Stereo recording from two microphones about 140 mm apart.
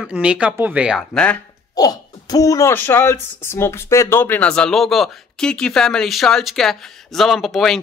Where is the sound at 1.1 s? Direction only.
10° left (ahead or behind).